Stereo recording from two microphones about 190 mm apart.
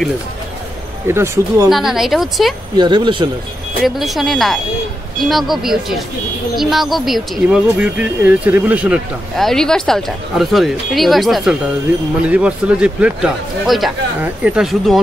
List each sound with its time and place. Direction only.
1.0 s speech: 15° right (ahead or behind)
1.7 s speech: centre (ahead or behind)
2.8 s speech: 25° right (ahead or behind)
3.8 s speech: centre (ahead or behind)